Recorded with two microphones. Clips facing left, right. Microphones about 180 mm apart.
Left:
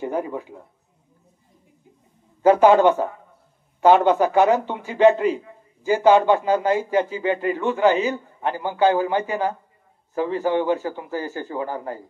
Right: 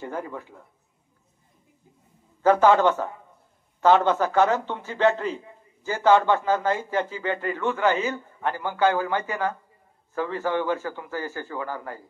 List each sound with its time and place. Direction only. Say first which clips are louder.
0.0 s a man's voice: left 7 dB; 15° left (ahead or behind)
2.4 s a man's voice: left 4 dB; 15° left (ahead or behind)